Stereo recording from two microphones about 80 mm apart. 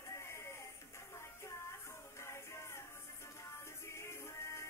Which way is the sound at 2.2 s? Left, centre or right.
Left.